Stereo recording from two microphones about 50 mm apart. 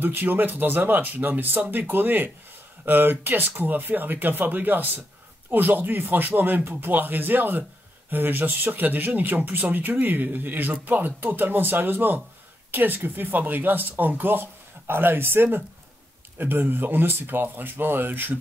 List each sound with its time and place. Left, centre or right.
0.0 s speech: right